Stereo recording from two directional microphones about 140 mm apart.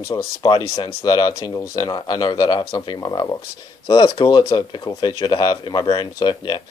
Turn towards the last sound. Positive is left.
turn(degrees=35)  # may be behind; listen again after turning